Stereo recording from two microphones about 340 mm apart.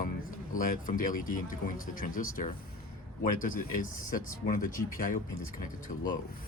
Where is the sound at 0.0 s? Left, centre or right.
Left.